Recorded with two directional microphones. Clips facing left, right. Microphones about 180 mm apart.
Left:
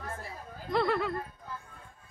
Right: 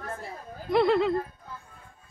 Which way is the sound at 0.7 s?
20° right (ahead or behind).